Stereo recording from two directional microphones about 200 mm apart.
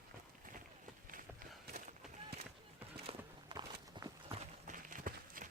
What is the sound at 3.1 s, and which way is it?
Walk, 25° right (ahead or behind).